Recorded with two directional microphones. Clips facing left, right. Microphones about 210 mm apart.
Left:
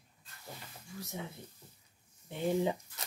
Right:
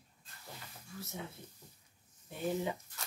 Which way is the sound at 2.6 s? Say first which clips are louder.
Left 5 dB; 25° left (ahead or behind).